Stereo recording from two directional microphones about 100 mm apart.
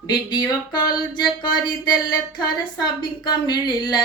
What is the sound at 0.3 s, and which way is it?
A woman's voice, 45° left (ahead or behind).